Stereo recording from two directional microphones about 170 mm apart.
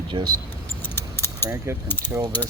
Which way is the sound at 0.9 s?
15° left (ahead or behind).